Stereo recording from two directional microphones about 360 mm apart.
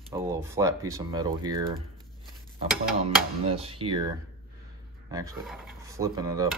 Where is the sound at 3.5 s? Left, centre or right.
Centre.